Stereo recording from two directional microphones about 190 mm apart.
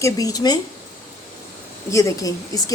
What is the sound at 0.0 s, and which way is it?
Speech, 20° left (ahead or behind).